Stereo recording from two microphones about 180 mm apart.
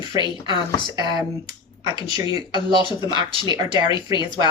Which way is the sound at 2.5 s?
25° left (ahead or behind).